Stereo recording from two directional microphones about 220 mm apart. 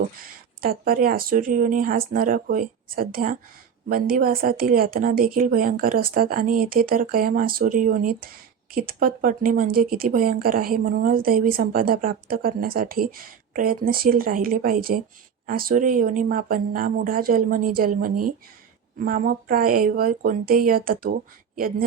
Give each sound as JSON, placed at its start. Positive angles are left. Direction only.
{"t": 0.6, "sound": "speech", "side_deg": -40}
{"t": 18.1, "sound": "speech", "side_deg": -90}
{"t": 18.9, "sound": "speech", "side_deg": -40}